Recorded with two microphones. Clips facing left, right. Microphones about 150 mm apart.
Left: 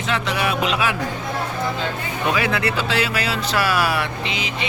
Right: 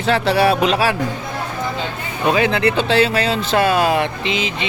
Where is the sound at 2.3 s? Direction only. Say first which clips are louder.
Right 6 dB; 30° right (ahead or behind).